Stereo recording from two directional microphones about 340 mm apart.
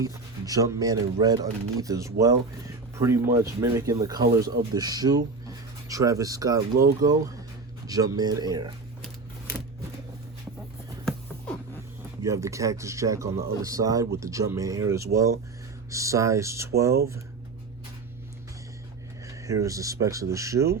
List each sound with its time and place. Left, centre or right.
0.0 s speech: centre
11.0 s a sound: centre
12.2 s speech: centre
19.3 s speech: centre